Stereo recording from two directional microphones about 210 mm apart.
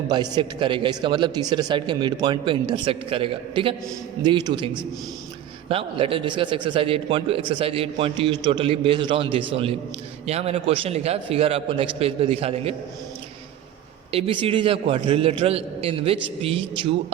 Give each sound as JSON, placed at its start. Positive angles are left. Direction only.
{"t": 0.1, "sound": "a man's voice", "side_deg": -20}
{"t": 14.1, "sound": "a man's voice", "side_deg": -25}